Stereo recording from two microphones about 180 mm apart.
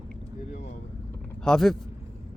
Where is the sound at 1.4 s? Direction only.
5° left (ahead or behind).